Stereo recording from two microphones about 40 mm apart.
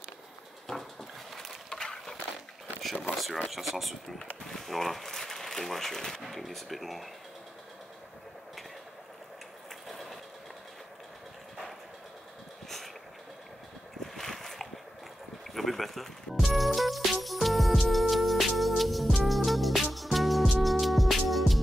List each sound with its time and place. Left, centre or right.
1.3 s a sound: centre
1.7 s a sound: centre
2.8 s a sound: centre
3.4 s speech: centre
9.8 s train: centre
12.6 s vehicle: centre
14.1 s boat: centre
15.5 s speech: centre
16.4 s music: centre